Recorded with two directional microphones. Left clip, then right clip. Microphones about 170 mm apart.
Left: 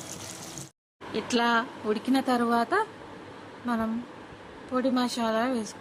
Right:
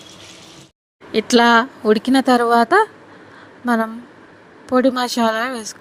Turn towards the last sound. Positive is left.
turn(degrees=-50)  # may be behind; listen again after turning